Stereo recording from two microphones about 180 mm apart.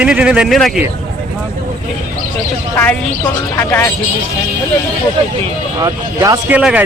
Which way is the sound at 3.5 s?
15° left (ahead or behind).